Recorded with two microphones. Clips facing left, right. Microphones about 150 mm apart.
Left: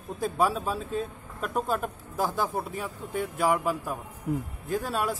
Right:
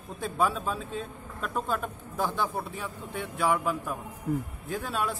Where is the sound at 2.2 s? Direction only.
40° left (ahead or behind).